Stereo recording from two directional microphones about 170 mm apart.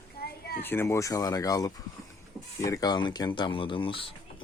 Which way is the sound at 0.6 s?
15° left (ahead or behind).